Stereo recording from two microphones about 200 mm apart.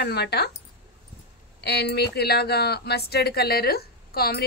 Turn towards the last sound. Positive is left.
turn(degrees=50)  # may be behind; listen again after turning